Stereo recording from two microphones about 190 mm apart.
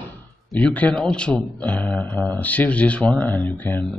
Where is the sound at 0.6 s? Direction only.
10° left (ahead or behind).